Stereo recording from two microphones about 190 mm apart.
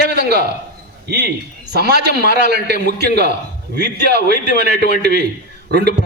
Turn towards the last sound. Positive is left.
turn(degrees=-60)  # may be behind; listen again after turning